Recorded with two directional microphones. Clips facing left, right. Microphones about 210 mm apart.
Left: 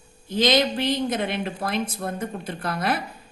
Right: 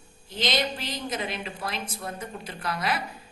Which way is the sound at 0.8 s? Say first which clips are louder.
Left 9 dB; 60° left (ahead or behind).